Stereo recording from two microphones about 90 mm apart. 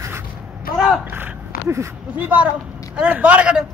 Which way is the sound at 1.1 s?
25° right (ahead or behind).